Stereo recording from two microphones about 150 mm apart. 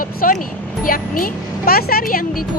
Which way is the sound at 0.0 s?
70° left (ahead or behind).